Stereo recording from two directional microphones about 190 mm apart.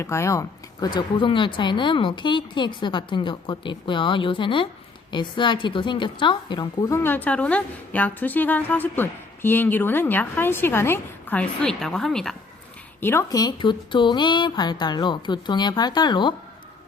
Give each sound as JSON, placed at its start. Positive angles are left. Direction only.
{"t": 0.0, "sound": "a woman's voice", "side_deg": 15}
{"t": 13.0, "sound": "speech", "side_deg": 15}